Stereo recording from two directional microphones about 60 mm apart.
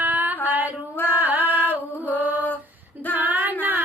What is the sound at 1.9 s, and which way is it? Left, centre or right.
Mantra, left.